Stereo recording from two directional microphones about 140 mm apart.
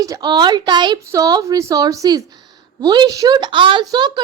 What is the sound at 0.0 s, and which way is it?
A woman's voice, 25° right (ahead or behind).